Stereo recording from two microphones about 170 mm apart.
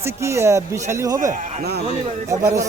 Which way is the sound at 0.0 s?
15° right (ahead or behind).